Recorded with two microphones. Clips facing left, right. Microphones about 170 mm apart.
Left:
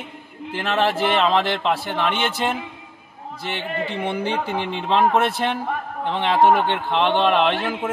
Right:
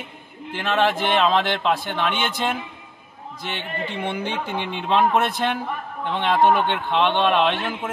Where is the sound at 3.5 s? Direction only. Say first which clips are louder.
Left 3 dB; 30° left (ahead or behind).